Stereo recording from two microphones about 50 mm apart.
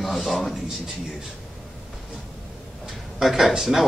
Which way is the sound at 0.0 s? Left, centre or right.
Centre.